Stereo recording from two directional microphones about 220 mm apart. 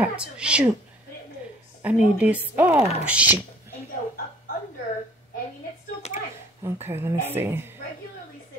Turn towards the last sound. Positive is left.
turn(degrees=-10)  # may be behind; listen again after turning